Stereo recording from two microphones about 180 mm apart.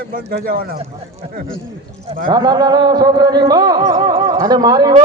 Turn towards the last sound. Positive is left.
turn(degrees=-20)  # may be behind; listen again after turning